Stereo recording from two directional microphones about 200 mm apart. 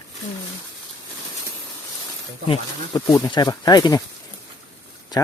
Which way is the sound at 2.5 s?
15° left (ahead or behind).